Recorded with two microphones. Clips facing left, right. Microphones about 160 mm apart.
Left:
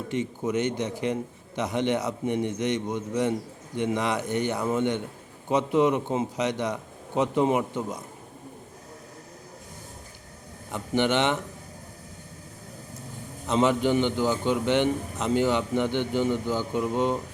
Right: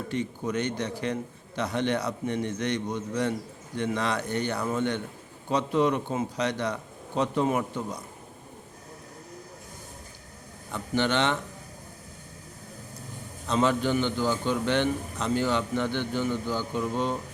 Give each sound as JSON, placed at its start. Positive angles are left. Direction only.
{"t": 0.1, "sound": "a man's voice", "side_deg": 20}
{"t": 10.7, "sound": "a man's voice", "side_deg": 15}
{"t": 13.5, "sound": "a man's voice", "side_deg": 20}